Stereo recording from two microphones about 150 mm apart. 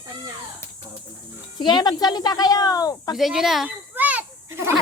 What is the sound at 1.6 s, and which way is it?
Speech, 30° left (ahead or behind).